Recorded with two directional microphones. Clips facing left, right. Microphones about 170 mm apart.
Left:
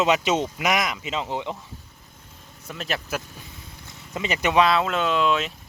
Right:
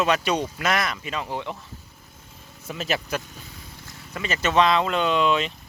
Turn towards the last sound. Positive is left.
turn(degrees=0)  # may be behind; listen again after turning